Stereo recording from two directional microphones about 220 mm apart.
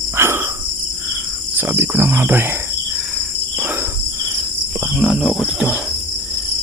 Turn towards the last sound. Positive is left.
turn(degrees=-5)  # may be behind; listen again after turning